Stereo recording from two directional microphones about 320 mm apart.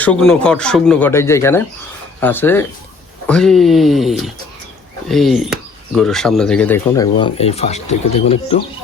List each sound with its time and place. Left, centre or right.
0.0 s speech: centre